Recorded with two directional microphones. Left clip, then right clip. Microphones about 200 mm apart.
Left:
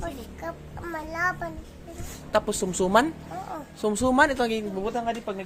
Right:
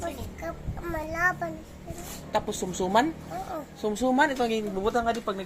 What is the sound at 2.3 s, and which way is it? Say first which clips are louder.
Speech: left 4 dB; 35° left (ahead or behind).